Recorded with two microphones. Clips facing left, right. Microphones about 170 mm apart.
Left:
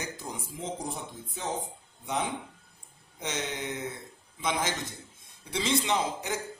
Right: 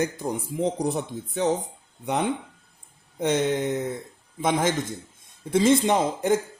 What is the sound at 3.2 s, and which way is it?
A man's voice, 55° right (ahead or behind).